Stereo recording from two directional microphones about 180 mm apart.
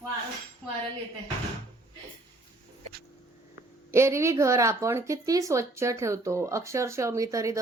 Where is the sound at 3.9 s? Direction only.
15° right (ahead or behind).